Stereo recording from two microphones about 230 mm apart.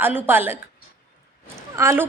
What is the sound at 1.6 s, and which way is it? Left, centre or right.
Speech, centre.